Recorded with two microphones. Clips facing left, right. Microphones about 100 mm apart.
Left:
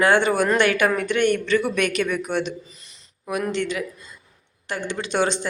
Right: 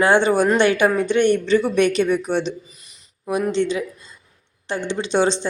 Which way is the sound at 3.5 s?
25° right (ahead or behind).